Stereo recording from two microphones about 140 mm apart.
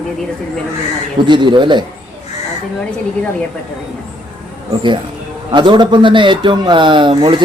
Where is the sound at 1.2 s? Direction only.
35° right (ahead or behind).